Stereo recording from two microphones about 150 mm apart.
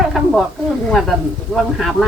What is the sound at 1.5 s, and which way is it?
Speech, centre (ahead or behind).